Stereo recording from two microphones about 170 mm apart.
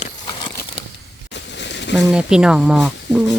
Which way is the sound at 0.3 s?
25° left (ahead or behind).